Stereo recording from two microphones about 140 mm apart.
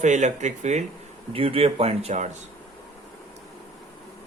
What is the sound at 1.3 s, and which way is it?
Speech, 40° right (ahead or behind).